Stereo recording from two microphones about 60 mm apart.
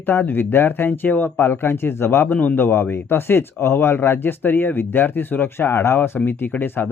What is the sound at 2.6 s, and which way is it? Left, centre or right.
Speech, left.